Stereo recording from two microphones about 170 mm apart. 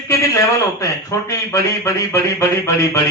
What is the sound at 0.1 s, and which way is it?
A man's voice, 20° left (ahead or behind).